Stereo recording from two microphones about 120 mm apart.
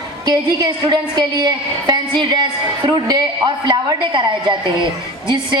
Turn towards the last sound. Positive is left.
turn(degrees=-40)  # may be behind; listen again after turning